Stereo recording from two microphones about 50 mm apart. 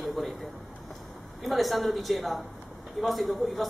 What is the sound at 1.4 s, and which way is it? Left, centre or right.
A woman's voice, centre.